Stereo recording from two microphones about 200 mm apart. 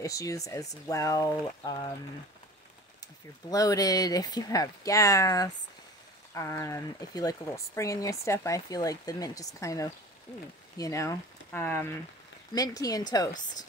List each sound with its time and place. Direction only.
0.0 s speech: 15° left (ahead or behind)
3.4 s speech: 20° left (ahead or behind)